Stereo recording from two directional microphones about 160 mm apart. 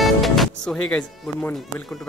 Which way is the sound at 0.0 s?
Centre (ahead or behind).